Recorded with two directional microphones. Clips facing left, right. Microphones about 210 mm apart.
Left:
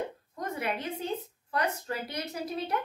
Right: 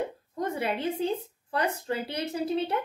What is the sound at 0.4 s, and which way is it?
A woman's voice, 30° right (ahead or behind).